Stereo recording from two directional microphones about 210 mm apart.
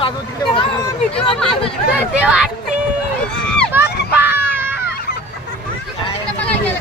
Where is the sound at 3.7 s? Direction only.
10° right (ahead or behind).